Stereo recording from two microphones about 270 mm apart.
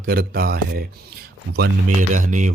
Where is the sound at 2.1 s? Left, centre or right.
Right.